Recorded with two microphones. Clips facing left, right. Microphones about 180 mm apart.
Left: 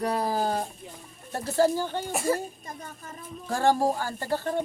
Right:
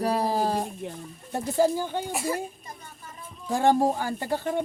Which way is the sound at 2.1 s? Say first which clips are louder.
Left 5 dB; 45° left (ahead or behind).